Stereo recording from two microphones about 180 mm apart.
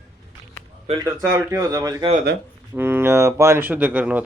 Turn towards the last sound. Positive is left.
turn(degrees=-10)  # may be behind; listen again after turning